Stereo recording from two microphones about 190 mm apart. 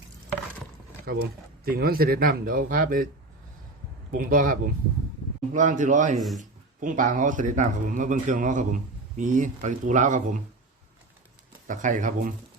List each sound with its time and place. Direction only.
1.0 s speech: 55° right (ahead or behind)
4.1 s speech: 45° right (ahead or behind)
11.7 s speech: 40° right (ahead or behind)